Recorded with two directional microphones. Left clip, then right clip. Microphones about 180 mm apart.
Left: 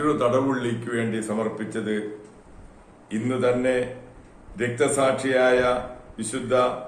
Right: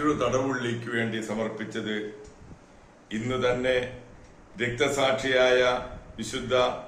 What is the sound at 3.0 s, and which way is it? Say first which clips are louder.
Speech: left 3 dB; 10° left (ahead or behind).